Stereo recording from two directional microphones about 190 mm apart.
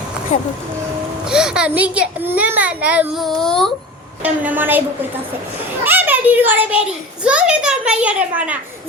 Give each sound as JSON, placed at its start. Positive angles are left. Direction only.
{"t": 0.3, "sound": "speech", "side_deg": 40}
{"t": 1.3, "sound": "a child's voice", "side_deg": -5}
{"t": 4.2, "sound": "a child's voice", "side_deg": -10}
{"t": 5.8, "sound": "a child's voice", "side_deg": -10}